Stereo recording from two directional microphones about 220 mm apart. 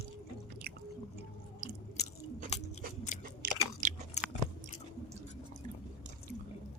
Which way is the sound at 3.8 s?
35° right (ahead or behind).